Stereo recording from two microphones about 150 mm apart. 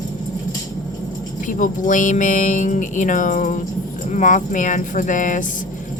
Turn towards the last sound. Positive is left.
turn(degrees=60)  # may be behind; listen again after turning